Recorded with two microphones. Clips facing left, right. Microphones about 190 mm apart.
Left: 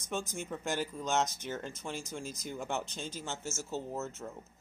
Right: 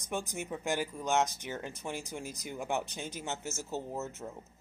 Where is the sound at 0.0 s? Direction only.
15° right (ahead or behind).